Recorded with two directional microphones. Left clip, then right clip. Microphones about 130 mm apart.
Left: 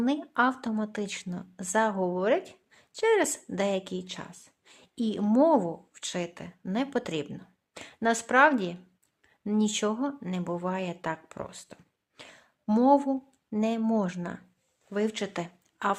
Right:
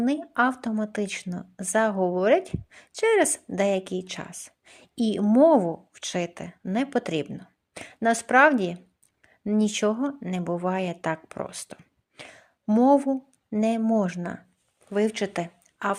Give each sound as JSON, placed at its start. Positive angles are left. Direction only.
{"t": 0.0, "sound": "speech", "side_deg": -20}